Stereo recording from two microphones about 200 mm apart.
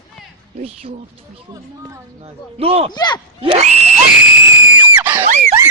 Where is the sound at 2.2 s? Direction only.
30° right (ahead or behind).